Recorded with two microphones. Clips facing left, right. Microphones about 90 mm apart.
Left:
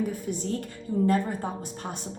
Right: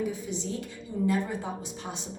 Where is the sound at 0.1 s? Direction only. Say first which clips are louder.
Left 3 dB; 50° left (ahead or behind).